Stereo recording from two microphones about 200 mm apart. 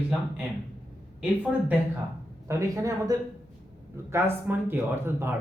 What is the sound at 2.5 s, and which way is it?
Speech, 15° right (ahead or behind).